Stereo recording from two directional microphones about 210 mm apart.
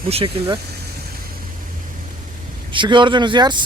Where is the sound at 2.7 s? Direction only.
25° right (ahead or behind).